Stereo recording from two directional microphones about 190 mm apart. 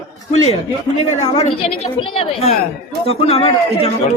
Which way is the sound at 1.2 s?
35° left (ahead or behind).